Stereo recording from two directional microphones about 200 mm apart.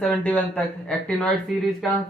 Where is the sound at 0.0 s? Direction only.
5° left (ahead or behind).